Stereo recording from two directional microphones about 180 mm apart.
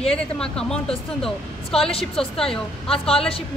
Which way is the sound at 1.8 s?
30° left (ahead or behind).